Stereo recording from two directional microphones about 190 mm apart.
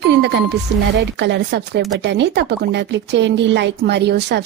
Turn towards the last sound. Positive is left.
turn(degrees=-60)  # may be behind; listen again after turning